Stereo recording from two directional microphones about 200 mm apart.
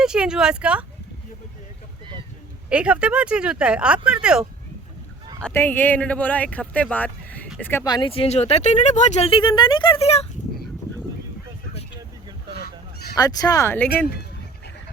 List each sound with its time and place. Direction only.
0.0 s speech: 5° right (ahead or behind)
2.6 s speech: 5° right (ahead or behind)
5.5 s speech: 10° left (ahead or behind); by 10.2 s 30° left (ahead or behind)
12.6 s fowl: 55° left (ahead or behind)
13.1 s speech: 20° left (ahead or behind)